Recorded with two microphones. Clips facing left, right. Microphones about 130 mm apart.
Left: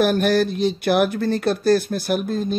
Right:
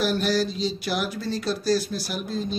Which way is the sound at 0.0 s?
55° left (ahead or behind).